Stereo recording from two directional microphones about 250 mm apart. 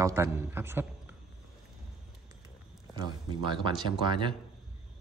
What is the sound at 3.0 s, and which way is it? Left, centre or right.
Speech, centre.